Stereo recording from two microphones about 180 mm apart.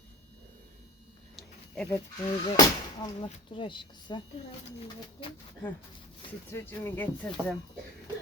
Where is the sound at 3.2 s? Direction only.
30° left (ahead or behind).